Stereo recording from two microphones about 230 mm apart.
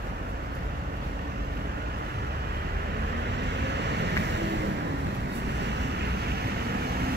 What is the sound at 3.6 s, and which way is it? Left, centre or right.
Vehicle, right.